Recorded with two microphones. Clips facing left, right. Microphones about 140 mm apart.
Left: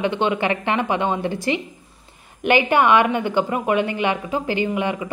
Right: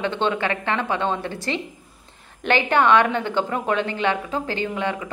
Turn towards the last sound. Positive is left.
turn(degrees=10)  # may be behind; listen again after turning